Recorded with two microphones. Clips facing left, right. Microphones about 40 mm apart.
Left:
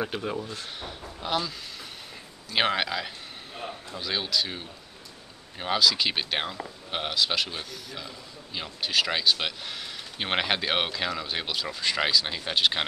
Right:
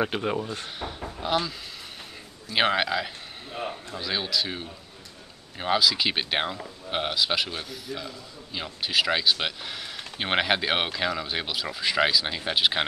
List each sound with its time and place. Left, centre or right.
0.0 s speech: right
1.2 s speech: centre
2.5 s a man's voice: centre